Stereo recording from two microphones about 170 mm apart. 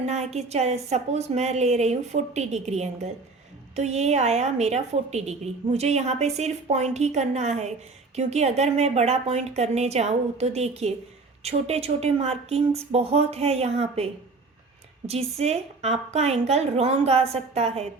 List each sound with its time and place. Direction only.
0.0 s a woman's voice: 40° right (ahead or behind)